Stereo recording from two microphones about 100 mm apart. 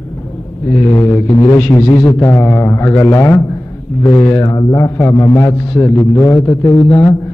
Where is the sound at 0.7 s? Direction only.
25° left (ahead or behind).